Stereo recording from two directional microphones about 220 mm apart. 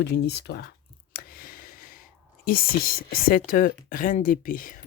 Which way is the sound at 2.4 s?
40° left (ahead or behind).